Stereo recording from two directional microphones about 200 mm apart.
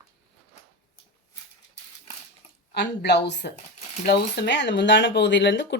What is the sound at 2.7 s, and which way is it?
Speech, 55° left (ahead or behind).